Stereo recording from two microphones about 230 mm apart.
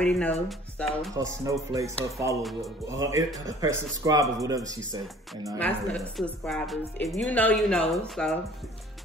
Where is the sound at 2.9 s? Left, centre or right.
Centre.